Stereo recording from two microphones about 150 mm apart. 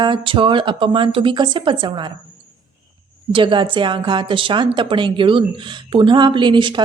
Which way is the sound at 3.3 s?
35° right (ahead or behind).